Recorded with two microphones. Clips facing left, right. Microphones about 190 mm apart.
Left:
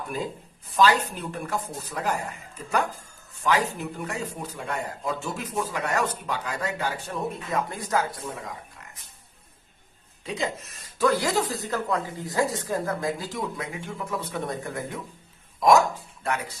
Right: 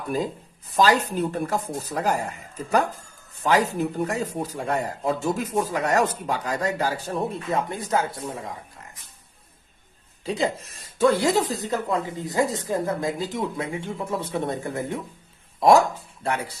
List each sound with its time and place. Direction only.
0.8 s speech: 40° right (ahead or behind)
10.2 s speech: 30° right (ahead or behind)
16.2 s speech: 30° right (ahead or behind)